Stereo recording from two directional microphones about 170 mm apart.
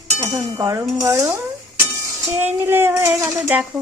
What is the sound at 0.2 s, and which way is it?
A woman's voice, 15° right (ahead or behind).